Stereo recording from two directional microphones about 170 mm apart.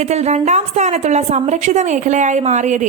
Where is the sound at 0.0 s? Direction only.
40° right (ahead or behind).